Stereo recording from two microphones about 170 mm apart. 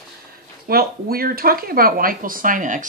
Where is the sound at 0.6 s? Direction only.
60° right (ahead or behind).